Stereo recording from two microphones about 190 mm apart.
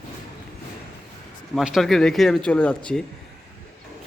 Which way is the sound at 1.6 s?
Centre (ahead or behind).